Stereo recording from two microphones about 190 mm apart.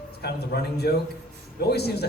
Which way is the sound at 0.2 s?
60° left (ahead or behind).